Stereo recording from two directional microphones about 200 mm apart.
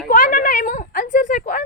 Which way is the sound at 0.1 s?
40° left (ahead or behind).